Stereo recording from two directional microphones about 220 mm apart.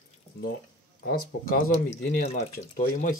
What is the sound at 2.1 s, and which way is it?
Speech, 30° left (ahead or behind).